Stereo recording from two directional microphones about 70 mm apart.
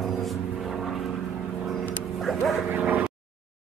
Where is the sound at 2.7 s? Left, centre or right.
Right.